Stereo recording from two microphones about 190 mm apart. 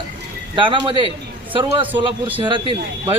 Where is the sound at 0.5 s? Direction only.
25° right (ahead or behind).